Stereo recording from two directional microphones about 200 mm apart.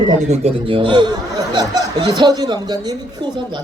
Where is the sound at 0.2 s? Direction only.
35° right (ahead or behind).